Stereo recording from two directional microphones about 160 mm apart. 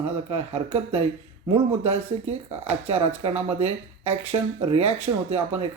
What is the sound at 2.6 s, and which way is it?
Speech, 40° right (ahead or behind).